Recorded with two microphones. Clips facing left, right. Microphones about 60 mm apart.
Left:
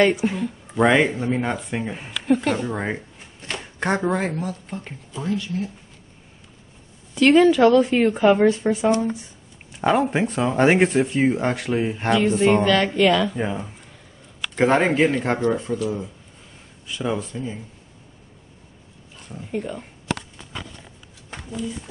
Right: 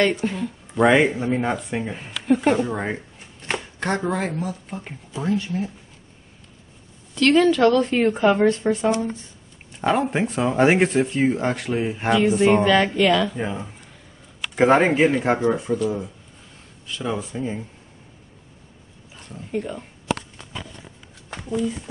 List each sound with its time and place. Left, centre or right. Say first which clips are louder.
0.0 s speech: left 2 dB; centre
3.8 s speech: left 3 dB; centre
5.2 s speech: right 2 dB; right
7.2 s speech: left 2 dB; centre
14.5 s speech: right 2 dB; centre
16.8 s speech: left 2 dB; centre
17.1 s speech: left 1 dB; centre
19.1 s speech: right 1 dB; centre